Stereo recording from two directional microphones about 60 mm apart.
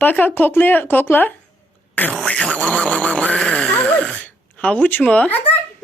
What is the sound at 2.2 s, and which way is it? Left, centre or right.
Speech, centre.